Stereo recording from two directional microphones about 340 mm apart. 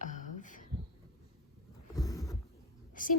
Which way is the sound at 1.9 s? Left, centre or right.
Centre.